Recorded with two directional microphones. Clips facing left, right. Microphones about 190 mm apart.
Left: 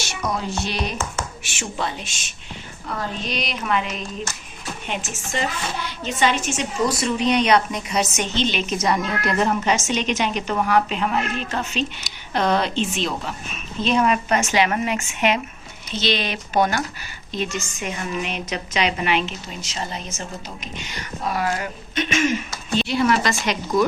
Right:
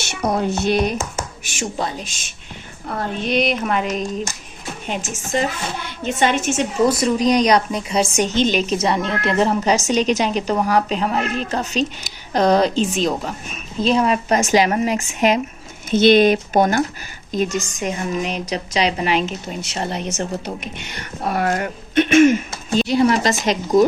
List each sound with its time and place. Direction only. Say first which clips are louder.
0.3 s speech: right 8 dB; 60° right (ahead or behind)
1.7 s a woman's voice: even; 40° right (ahead or behind)
2.8 s speech: right 4 dB; 55° right (ahead or behind)
7.0 s a woman's voice: right 4 dB; 35° right (ahead or behind)
8.4 s a woman's voice: right 4 dB; 45° right (ahead or behind)
15.9 s a woman's voice: right 12 dB; 50° right (ahead or behind)
19.6 s speech: right 6 dB; 60° right (ahead or behind)
20.5 s speech: right 5 dB; 55° right (ahead or behind)